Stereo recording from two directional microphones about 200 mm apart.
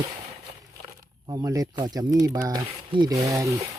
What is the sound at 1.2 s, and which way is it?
Speech, 20° right (ahead or behind).